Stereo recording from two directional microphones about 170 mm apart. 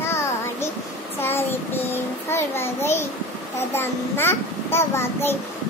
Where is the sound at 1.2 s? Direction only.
10° left (ahead or behind).